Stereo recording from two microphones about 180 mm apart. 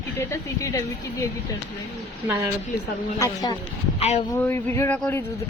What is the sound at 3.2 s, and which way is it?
Speech, 15° left (ahead or behind).